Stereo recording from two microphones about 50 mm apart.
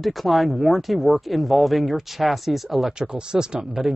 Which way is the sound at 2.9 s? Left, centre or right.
Centre.